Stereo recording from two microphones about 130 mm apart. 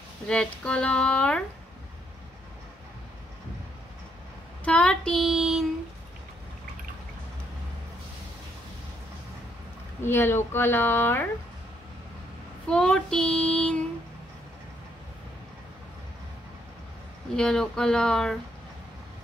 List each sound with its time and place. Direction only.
0.3 s a woman's voice: 5° left (ahead or behind)
4.6 s child singing: 5° left (ahead or behind)
10.0 s a woman's voice: 20° left (ahead or behind)
12.6 s a woman's voice: 5° left (ahead or behind)
17.4 s speech: 5° left (ahead or behind)